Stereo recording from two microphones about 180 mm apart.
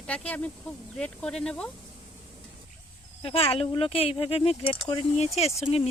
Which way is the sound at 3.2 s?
30° left (ahead or behind).